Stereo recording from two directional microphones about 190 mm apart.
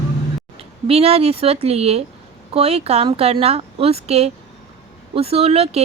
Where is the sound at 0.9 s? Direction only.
30° right (ahead or behind).